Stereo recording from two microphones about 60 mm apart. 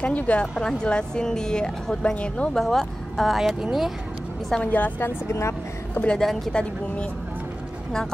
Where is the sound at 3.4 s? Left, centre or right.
Centre.